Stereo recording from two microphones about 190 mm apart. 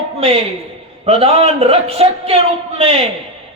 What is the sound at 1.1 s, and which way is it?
A man's voice, 30° right (ahead or behind).